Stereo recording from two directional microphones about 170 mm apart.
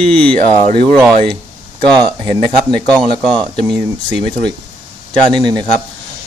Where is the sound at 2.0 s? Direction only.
25° right (ahead or behind).